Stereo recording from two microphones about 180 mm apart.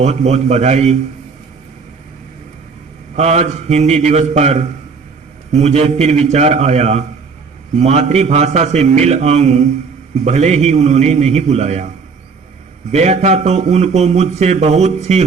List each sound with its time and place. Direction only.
0.0 s a man's voice: 40° right (ahead or behind)
3.2 s a man's voice: 40° right (ahead or behind)
12.9 s a man's voice: 40° right (ahead or behind)